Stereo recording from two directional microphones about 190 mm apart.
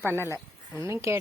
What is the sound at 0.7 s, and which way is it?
Speech, 15° right (ahead or behind).